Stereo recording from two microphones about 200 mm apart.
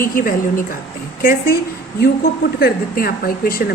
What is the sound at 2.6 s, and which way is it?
A woman's voice, 50° left (ahead or behind).